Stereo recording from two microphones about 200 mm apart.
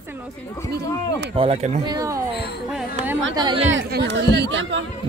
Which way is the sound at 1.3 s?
30° right (ahead or behind).